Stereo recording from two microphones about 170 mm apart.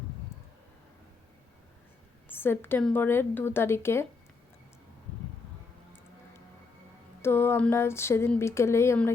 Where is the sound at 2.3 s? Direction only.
10° left (ahead or behind).